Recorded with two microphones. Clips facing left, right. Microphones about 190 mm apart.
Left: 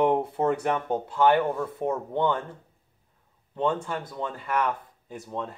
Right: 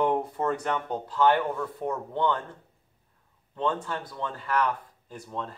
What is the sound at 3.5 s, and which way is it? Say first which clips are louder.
Speech: left 2 dB; 25° left (ahead or behind).